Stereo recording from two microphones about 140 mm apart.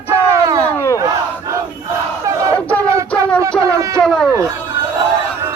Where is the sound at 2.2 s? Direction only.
20° right (ahead or behind).